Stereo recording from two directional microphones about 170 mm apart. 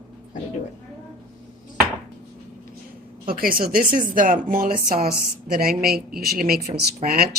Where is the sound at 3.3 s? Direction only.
60° right (ahead or behind).